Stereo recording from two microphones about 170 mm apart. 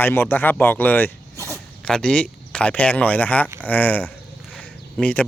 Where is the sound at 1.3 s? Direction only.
15° right (ahead or behind).